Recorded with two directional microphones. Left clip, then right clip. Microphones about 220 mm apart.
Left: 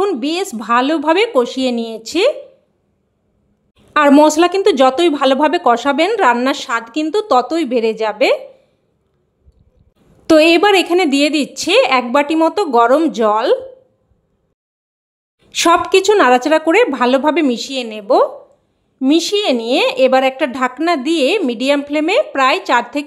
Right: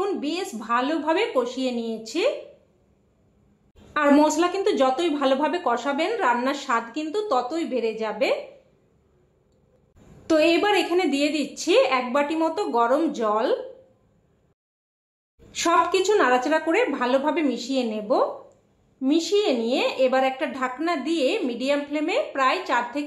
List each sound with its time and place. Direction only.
0.0 s a woman's voice: 45° left (ahead or behind)
3.9 s a woman's voice: 45° left (ahead or behind)
10.2 s a woman's voice: 45° left (ahead or behind)
15.5 s a woman's voice: 45° left (ahead or behind)